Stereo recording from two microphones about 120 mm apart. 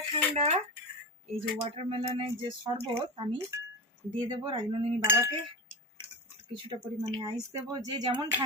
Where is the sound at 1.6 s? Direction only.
50° right (ahead or behind).